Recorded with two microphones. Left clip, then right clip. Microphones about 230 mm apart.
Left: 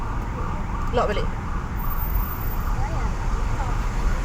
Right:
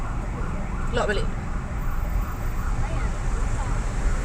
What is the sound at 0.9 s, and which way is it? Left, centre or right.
Speech, right.